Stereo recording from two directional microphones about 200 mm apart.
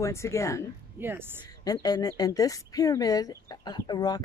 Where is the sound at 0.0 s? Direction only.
15° left (ahead or behind).